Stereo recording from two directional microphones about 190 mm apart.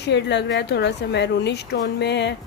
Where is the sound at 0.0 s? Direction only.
65° left (ahead or behind).